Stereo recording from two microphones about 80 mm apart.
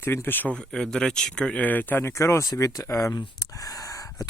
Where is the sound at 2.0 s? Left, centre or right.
Left.